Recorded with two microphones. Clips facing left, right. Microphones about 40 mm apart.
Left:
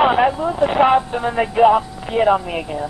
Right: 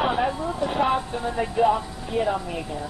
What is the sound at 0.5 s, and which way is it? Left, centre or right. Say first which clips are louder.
Speech: left 9 dB; left.